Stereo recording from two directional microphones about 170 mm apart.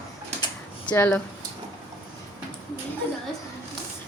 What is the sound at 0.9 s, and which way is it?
Speech, 10° left (ahead or behind).